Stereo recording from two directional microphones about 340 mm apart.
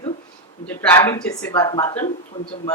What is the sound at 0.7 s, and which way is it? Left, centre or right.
Speech, centre.